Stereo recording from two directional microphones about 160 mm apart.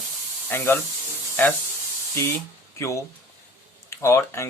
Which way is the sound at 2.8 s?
20° left (ahead or behind).